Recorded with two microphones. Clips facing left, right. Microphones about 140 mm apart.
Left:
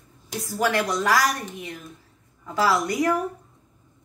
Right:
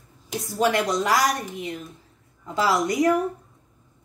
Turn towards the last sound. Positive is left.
turn(degrees=-20)  # may be behind; listen again after turning